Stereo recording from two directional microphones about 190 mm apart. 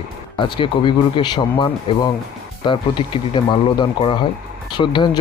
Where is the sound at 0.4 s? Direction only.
25° left (ahead or behind).